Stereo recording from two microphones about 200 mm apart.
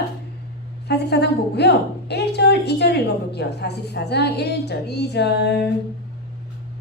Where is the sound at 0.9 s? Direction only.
55° left (ahead or behind).